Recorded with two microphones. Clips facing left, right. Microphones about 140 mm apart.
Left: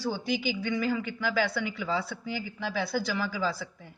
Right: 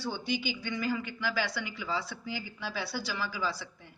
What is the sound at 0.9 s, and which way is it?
Speech, 55° left (ahead or behind).